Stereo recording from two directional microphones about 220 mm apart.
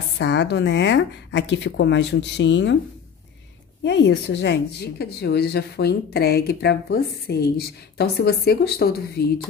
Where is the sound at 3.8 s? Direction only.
55° left (ahead or behind).